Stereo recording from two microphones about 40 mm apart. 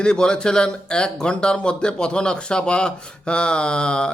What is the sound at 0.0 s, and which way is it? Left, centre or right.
Speech, left.